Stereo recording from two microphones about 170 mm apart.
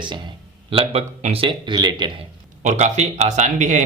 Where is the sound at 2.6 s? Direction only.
40° right (ahead or behind).